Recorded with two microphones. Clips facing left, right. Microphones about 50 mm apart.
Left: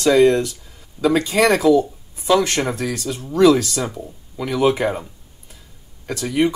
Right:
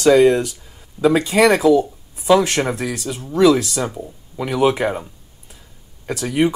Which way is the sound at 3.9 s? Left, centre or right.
Centre.